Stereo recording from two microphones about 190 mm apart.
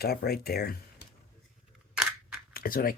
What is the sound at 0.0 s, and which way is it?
Speech, 55° left (ahead or behind).